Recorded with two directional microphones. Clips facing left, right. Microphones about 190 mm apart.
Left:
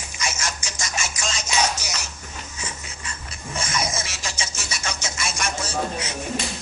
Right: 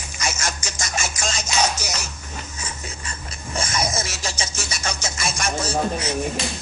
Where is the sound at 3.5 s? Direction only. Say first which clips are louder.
Right 2 dB; 40° right (ahead or behind).